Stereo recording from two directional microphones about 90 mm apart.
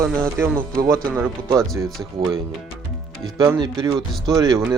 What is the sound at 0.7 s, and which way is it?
Speech, 40° right (ahead or behind).